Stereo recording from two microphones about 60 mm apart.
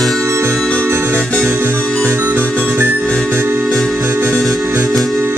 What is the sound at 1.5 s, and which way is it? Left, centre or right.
Music, right.